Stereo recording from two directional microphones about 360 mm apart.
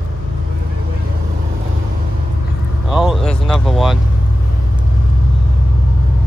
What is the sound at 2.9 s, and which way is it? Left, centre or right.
Speech, centre.